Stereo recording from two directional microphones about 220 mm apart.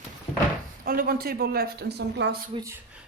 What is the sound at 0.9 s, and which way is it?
A woman's voice, 45° right (ahead or behind).